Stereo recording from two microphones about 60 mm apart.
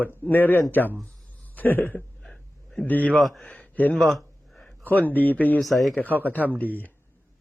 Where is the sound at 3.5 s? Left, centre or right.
Left.